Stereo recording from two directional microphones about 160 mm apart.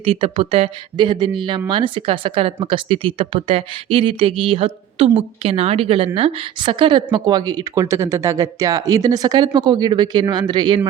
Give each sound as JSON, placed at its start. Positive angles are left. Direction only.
{"t": 0.0, "sound": "a woman's voice", "side_deg": -35}